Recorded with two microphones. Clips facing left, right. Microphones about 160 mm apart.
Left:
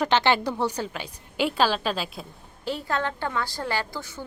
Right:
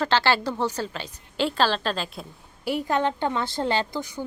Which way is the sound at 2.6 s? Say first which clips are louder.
Right 4 dB; 15° right (ahead or behind).